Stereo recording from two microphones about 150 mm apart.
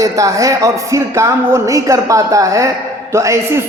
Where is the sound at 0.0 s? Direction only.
20° right (ahead or behind).